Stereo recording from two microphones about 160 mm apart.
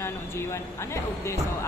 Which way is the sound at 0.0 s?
15° left (ahead or behind).